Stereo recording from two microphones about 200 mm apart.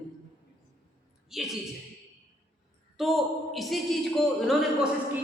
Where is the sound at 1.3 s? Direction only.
Centre (ahead or behind).